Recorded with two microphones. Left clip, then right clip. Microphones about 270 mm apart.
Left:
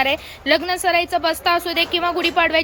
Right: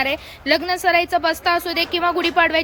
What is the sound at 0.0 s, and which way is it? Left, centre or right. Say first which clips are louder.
A woman's voice: left 2 dB; centre.